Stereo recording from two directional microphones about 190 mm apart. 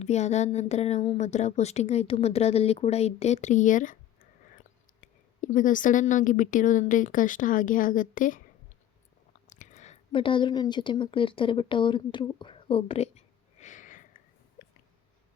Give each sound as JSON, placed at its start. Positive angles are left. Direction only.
{"t": 0.0, "sound": "a woman's voice", "side_deg": 35}
{"t": 4.9, "sound": "a woman's voice", "side_deg": 45}
{"t": 9.5, "sound": "a woman's voice", "side_deg": 40}
{"t": 14.6, "sound": "a sound", "side_deg": 55}